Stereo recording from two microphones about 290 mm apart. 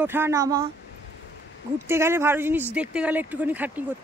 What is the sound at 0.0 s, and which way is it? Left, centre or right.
Speech, centre.